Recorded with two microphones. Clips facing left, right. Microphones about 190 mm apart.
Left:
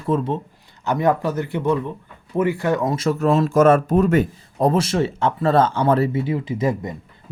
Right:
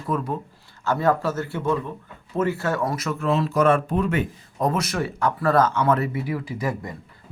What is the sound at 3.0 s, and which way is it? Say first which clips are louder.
Speech: left 8 dB; 40° left (ahead or behind).